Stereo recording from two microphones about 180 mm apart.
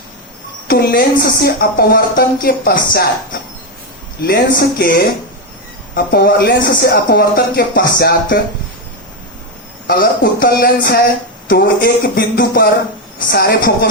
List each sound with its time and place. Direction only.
0.7 s speech: 60° left (ahead or behind)
4.2 s speech: 60° left (ahead or behind)
9.8 s a woman's voice: 55° left (ahead or behind); by 13.7 s 70° left (ahead or behind)